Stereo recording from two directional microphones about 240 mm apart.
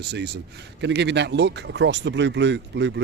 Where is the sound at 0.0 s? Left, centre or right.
Right.